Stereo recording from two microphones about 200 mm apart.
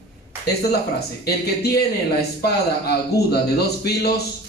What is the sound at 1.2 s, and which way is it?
A man's voice, 55° left (ahead or behind).